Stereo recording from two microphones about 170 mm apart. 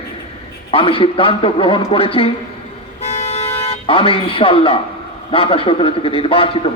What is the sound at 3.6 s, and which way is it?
A man's voice, 30° left (ahead or behind).